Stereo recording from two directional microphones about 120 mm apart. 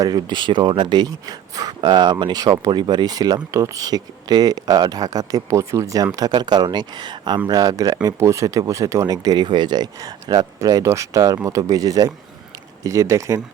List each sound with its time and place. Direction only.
0.0 s speech: 35° right (ahead or behind)